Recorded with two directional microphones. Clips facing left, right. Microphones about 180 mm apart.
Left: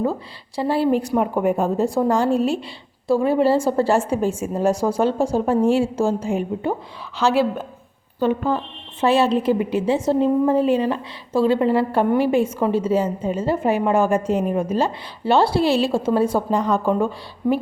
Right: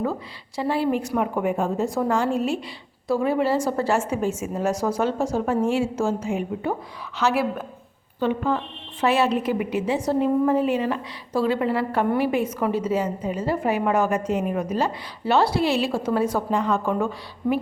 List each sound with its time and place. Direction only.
0.0 s a woman's voice: 30° left (ahead or behind)